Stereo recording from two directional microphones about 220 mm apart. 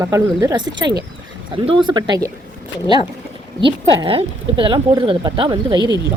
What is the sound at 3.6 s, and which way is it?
A woman's voice, 25° right (ahead or behind).